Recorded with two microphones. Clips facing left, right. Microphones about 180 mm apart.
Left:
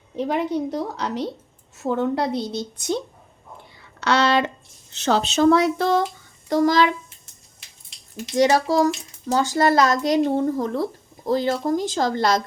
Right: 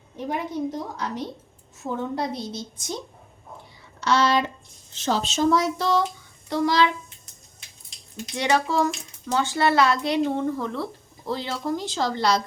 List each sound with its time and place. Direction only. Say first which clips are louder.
0.2 s a woman's voice: left 5 dB; 80° left
3.8 s a sound: left 2 dB; 70° left (ahead or behind)
4.9 s speech: left 4 dB; 70° left (ahead or behind); by 6.9 s 45° left (ahead or behind)
8.4 s speech: left 5 dB; 40° left (ahead or behind)